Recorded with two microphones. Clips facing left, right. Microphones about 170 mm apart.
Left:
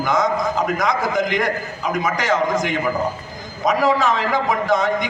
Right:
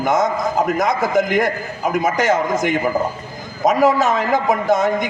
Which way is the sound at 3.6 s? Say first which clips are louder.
Right 3 dB; 45° right (ahead or behind).